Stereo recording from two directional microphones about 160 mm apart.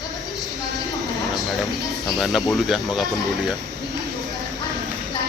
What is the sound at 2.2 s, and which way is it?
Speech, centre (ahead or behind).